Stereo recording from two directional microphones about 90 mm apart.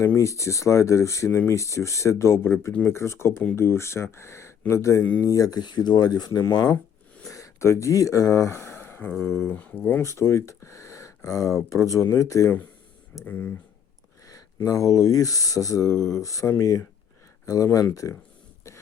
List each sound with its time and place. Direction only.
0.0 s speech: 35° left (ahead or behind)
9.5 s speech: 20° left (ahead or behind)
10.0 s speech: 30° left (ahead or behind)
13.2 s speech: 20° left (ahead or behind)
14.3 s speech: 40° left (ahead or behind)